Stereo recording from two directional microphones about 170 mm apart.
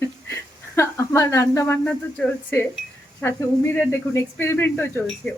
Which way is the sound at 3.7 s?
10° left (ahead or behind).